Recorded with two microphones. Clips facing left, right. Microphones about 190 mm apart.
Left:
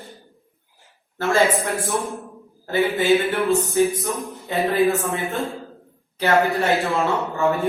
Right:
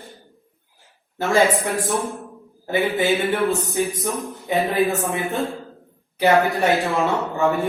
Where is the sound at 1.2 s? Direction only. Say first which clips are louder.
Right 1 dB; 15° right (ahead or behind).